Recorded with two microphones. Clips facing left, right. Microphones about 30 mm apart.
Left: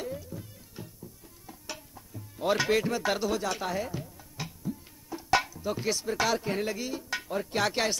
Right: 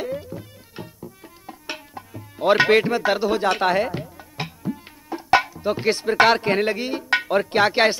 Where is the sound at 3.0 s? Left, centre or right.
Right.